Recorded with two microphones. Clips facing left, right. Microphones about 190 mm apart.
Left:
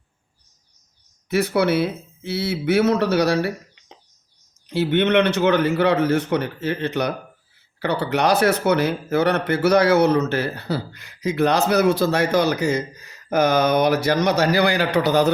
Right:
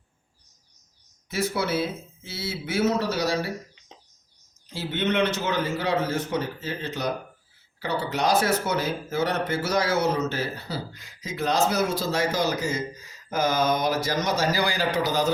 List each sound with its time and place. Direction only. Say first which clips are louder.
1.3 s speech: left 7 dB; 65° left (ahead or behind)